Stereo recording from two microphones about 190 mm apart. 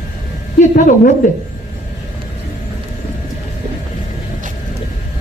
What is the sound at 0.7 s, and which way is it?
Speech, 45° left (ahead or behind).